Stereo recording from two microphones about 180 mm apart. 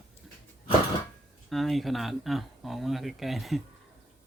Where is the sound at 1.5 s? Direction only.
Centre (ahead or behind).